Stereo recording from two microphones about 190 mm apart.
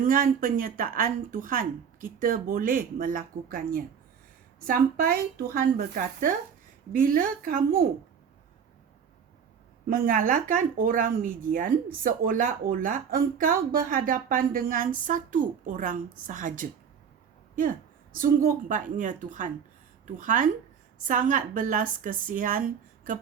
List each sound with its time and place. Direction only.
0.0 s speech: 45° right (ahead or behind)
9.9 s speech: 45° right (ahead or behind)